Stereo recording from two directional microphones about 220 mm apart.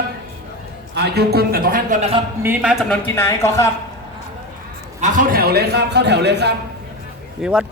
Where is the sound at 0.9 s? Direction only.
50° right (ahead or behind); by 2.2 s 30° right (ahead or behind).